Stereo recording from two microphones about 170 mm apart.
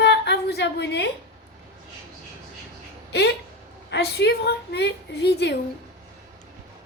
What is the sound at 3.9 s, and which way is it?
A woman's voice, 80° left.